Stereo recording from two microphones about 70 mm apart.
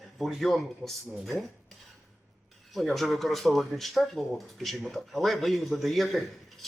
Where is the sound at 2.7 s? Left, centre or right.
Centre.